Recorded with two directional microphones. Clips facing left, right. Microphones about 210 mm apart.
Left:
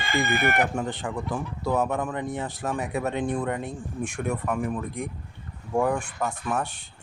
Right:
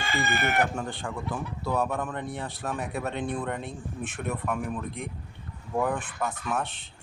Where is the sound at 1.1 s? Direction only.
15° left (ahead or behind).